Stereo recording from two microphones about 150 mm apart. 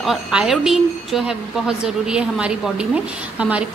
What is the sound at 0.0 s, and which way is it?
A woman's voice, 5° right (ahead or behind).